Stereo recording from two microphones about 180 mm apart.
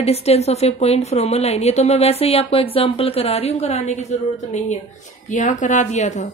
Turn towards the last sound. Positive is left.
turn(degrees=40)  # may be behind; listen again after turning